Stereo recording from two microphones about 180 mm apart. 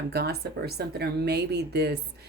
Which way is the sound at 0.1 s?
65° right (ahead or behind).